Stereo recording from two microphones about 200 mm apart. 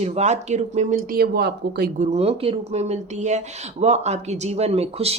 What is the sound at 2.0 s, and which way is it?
Speech, 35° right (ahead or behind).